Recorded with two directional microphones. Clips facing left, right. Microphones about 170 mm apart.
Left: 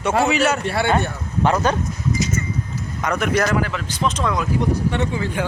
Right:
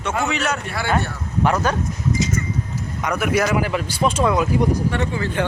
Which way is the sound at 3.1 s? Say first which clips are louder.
Even; 5° right (ahead or behind).